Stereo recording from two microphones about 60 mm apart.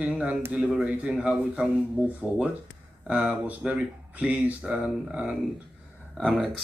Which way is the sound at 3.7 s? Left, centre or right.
Right.